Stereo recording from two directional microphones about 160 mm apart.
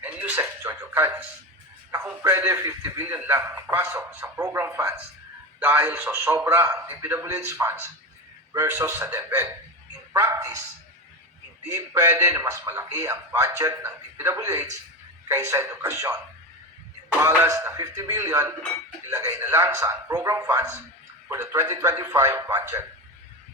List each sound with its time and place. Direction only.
0.0 s music: 10° right (ahead or behind)
1.9 s speech: 10° right (ahead or behind)
11.7 s a man's voice: 20° right (ahead or behind)